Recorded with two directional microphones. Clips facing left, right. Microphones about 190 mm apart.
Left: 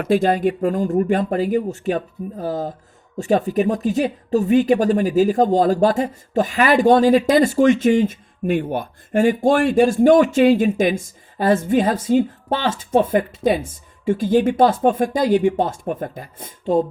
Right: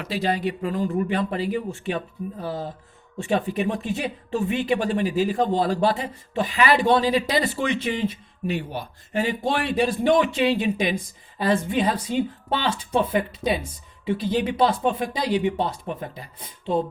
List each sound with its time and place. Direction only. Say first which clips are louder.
0.0 s speech: left 8 dB; 50° left (ahead or behind)